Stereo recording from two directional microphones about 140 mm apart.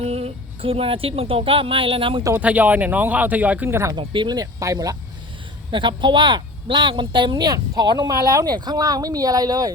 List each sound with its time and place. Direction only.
0.0 s speech: 45° right (ahead or behind)
2.4 s speech: 10° right (ahead or behind)
3.9 s speech: 35° right (ahead or behind)
5.7 s speech: 35° right (ahead or behind)